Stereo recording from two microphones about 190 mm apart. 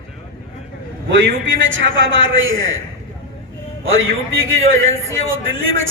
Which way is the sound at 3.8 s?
90° right.